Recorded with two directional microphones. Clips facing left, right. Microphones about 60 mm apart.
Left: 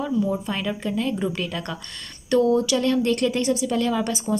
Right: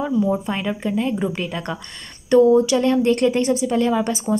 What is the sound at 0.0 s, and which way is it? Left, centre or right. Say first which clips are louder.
A woman's voice: right 4 dB; right.